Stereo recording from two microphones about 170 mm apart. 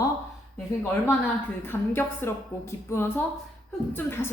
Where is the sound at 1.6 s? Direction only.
10° left (ahead or behind).